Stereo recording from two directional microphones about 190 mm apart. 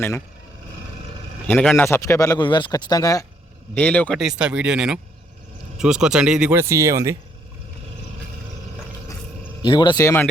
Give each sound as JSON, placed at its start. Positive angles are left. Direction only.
{"t": 1.5, "sound": "speech", "side_deg": 5}
{"t": 3.8, "sound": "speech", "side_deg": 5}
{"t": 9.0, "sound": "a sound", "side_deg": 20}